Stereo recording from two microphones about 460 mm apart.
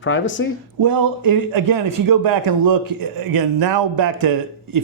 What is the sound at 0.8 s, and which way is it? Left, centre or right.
A man's voice, right.